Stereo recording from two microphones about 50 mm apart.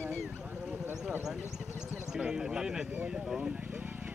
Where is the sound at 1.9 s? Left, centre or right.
Centre; by 4.1 s right.